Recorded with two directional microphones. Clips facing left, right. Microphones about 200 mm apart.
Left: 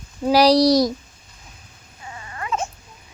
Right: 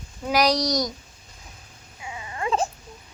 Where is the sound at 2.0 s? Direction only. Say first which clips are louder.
Right 3 dB; 10° right (ahead or behind); by 2.7 s 30° right (ahead or behind).